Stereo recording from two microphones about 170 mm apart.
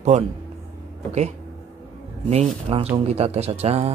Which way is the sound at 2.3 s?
35° right (ahead or behind).